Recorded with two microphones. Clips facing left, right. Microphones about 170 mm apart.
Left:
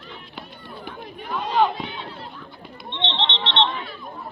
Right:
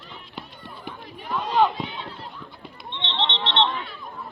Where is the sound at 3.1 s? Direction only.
Centre (ahead or behind).